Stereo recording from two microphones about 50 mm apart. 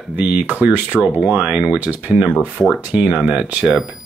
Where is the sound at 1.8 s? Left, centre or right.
Right.